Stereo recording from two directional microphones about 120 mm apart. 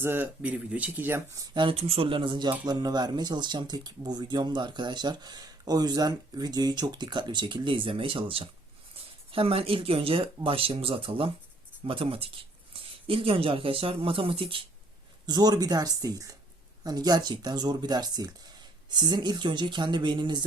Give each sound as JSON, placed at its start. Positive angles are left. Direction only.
{"t": 0.0, "sound": "speech", "side_deg": -15}
{"t": 1.4, "sound": "speech", "side_deg": -45}
{"t": 15.3, "sound": "speech", "side_deg": -35}